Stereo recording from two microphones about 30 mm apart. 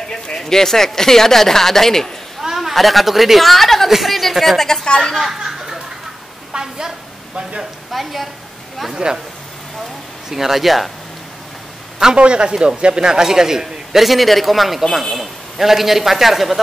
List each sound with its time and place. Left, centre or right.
0.4 s speech: centre
2.4 s a woman's voice: centre
4.8 s a woman's voice: left
5.2 s a sound: centre
6.5 s a sound: right
7.9 s a man's voice: centre
8.9 s speech: right
10.3 s a man's voice: centre
12.2 s speech: right; by 13.7 s centre
13.9 s a man's voice: centre